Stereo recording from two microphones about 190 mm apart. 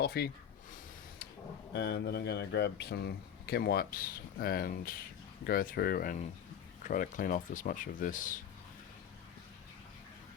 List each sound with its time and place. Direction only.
0.0 s speech: 55° left (ahead or behind)
1.7 s speech: 60° left (ahead or behind); by 8.4 s 45° left (ahead or behind)